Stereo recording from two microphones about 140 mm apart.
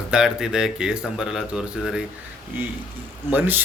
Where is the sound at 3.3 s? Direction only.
15° right (ahead or behind).